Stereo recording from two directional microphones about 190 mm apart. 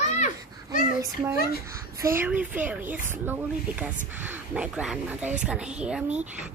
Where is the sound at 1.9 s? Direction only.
15° right (ahead or behind).